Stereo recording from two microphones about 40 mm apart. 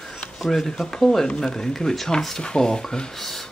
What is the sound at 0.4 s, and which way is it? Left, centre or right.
Speech, centre.